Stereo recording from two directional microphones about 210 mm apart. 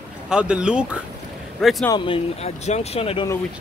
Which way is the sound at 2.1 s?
30° left (ahead or behind).